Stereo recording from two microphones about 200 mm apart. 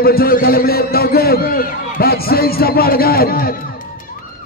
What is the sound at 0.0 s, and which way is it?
A man's voice, 50° left (ahead or behind).